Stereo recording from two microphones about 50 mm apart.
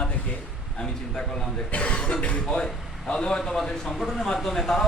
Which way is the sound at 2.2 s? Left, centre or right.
Left.